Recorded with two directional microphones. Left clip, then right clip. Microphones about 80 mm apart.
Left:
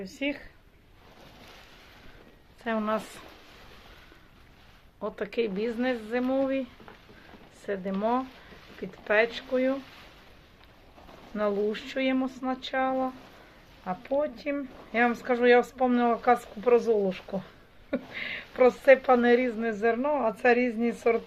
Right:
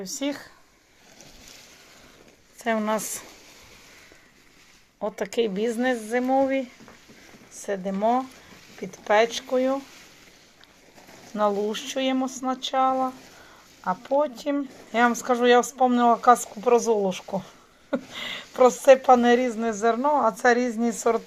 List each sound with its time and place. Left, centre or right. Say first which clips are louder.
2.6 s a woman's voice: right 4 dB; right
5.0 s speech: right 4 dB; right
7.7 s speech: right 5 dB; right
11.3 s speech: right 4 dB; right
14.2 s speech: right 5 dB; right